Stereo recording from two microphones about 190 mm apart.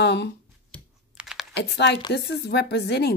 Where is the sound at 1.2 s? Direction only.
5° right (ahead or behind).